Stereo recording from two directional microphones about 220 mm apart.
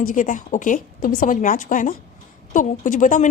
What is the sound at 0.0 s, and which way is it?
Speech, 35° left (ahead or behind).